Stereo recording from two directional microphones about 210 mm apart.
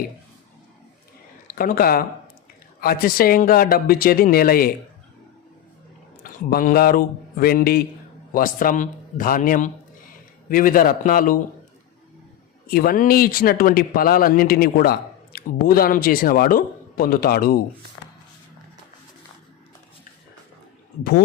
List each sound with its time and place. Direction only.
1.5 s speech: 45° left (ahead or behind)
6.2 s a man's voice: 40° left (ahead or behind)
12.6 s speech: 45° left (ahead or behind)
21.0 s speech: 45° left (ahead or behind)